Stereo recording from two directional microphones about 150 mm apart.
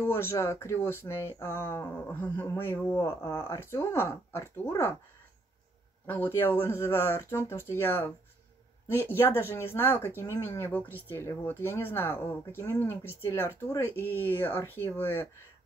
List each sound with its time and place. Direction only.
0.0 s speech: 15° left (ahead or behind)
6.0 s speech: 15° left (ahead or behind)